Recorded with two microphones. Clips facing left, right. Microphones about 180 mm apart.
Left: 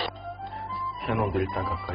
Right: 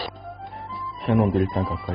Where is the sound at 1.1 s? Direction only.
30° right (ahead or behind).